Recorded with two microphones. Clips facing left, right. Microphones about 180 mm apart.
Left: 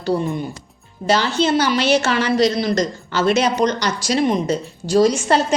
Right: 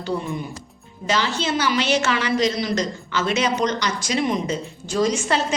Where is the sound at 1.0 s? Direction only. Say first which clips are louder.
Left 6 dB; 35° left (ahead or behind).